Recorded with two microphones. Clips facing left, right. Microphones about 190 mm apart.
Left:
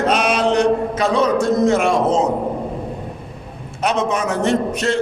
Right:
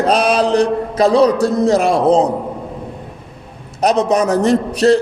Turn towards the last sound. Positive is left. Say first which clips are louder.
# right 6 dB
turn(degrees=-35)  # may be behind; listen again after turning